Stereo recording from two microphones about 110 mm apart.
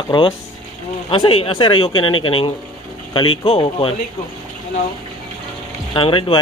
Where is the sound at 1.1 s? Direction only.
45° left (ahead or behind).